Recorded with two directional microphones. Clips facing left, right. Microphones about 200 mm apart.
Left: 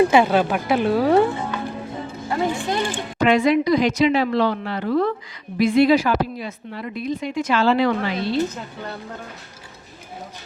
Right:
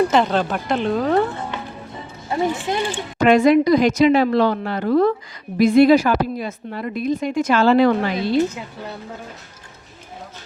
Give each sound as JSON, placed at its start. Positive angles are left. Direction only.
{"t": 0.0, "sound": "speech", "side_deg": 10}
{"t": 2.3, "sound": "speech", "side_deg": -20}
{"t": 3.2, "sound": "a woman's voice", "side_deg": -45}
{"t": 8.5, "sound": "a woman's voice", "side_deg": -5}